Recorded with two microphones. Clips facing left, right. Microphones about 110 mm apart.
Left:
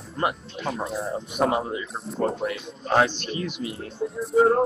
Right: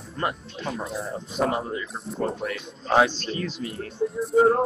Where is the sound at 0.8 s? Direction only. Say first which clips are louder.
Left 2 dB; centre (ahead or behind).